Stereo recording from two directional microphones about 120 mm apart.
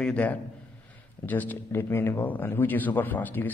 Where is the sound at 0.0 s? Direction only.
10° left (ahead or behind).